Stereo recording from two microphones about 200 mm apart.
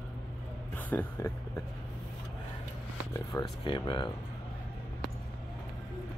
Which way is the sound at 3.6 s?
25° left (ahead or behind).